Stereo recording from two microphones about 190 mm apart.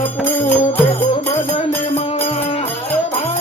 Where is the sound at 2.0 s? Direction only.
30° left (ahead or behind).